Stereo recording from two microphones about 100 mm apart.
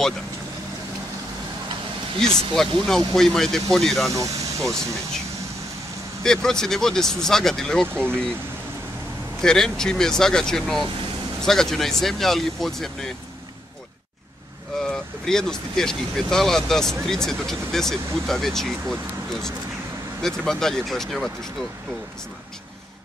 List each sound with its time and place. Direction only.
2.1 s speech: 5° left (ahead or behind)
4.1 s speech: 35° right (ahead or behind)
6.2 s speech: 5° left (ahead or behind)
9.4 s speech: 5° left (ahead or behind)
14.8 s speech: 5° left (ahead or behind)
20.2 s speech: 5° left (ahead or behind)